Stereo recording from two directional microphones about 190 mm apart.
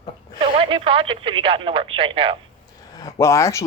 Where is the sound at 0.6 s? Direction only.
30° right (ahead or behind).